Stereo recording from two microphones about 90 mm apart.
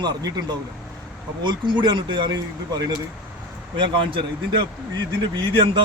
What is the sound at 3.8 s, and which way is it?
Speech, 70° right (ahead or behind).